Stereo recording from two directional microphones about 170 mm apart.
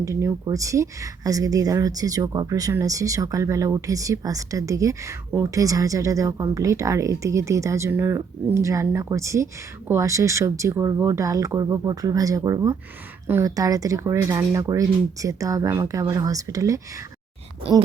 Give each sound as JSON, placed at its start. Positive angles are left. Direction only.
{"t": 0.0, "sound": "speech", "side_deg": -15}